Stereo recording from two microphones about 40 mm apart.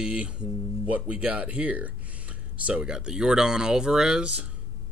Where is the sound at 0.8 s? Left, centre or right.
Right.